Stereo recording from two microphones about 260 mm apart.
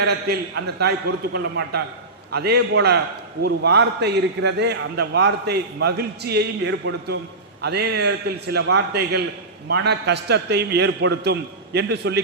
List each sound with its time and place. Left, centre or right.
0.3 s a man's voice: right